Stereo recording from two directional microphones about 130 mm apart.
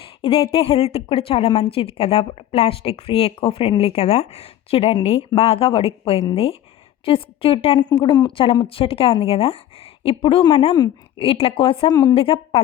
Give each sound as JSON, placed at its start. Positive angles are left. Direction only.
{"t": 0.2, "sound": "a woman's voice", "side_deg": 45}
{"t": 8.6, "sound": "a woman's voice", "side_deg": 45}
{"t": 11.9, "sound": "a woman's voice", "side_deg": 30}
{"t": 12.1, "sound": "a woman's voice", "side_deg": 45}